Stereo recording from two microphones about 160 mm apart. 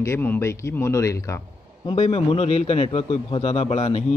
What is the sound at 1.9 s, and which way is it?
Speech, 40° left (ahead or behind).